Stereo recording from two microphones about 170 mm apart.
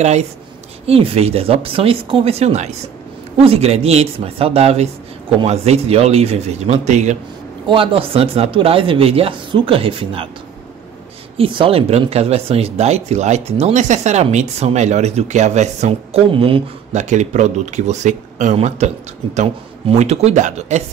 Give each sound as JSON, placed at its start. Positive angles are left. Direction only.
{"t": 0.0, "sound": "speech", "side_deg": -40}
{"t": 7.6, "sound": "speech", "side_deg": -30}
{"t": 11.3, "sound": "speech", "side_deg": -30}
{"t": 20.0, "sound": "speech", "side_deg": -40}